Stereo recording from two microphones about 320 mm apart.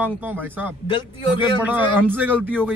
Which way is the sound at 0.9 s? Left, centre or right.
Centre.